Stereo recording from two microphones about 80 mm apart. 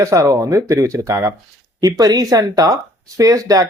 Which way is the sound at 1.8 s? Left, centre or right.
Right.